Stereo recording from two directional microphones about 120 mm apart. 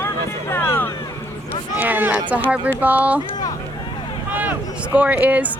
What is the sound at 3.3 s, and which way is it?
Hubbub, 30° left (ahead or behind).